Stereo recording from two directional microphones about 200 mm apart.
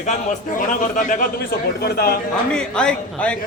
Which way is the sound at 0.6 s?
40° left (ahead or behind).